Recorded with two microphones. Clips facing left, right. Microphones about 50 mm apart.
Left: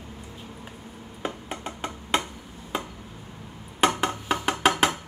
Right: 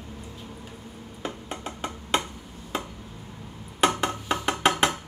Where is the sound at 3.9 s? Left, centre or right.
Centre.